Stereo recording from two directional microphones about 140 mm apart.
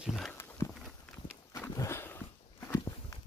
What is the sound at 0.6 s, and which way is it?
Walk, 20° left (ahead or behind).